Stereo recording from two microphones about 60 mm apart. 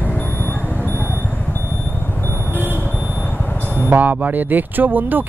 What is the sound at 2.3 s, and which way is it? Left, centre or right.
Vehicle, right.